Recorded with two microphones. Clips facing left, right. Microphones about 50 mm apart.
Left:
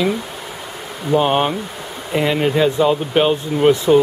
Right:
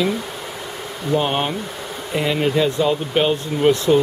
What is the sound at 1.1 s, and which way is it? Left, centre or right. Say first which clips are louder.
Speech: left 4 dB; centre.